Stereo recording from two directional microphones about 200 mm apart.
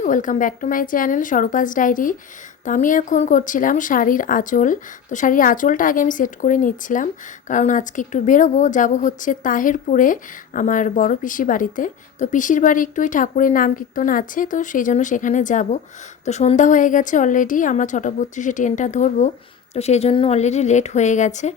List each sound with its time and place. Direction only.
0.0 s speech: 40° left (ahead or behind)